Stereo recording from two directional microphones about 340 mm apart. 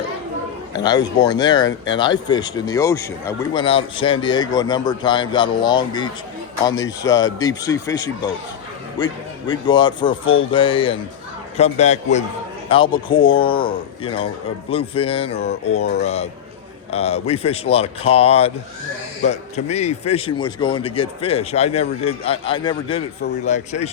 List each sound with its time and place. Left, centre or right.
0.7 s speech: centre